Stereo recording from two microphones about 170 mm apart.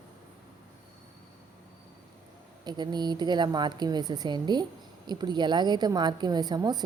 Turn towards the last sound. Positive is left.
turn(degrees=-25)  # may be behind; listen again after turning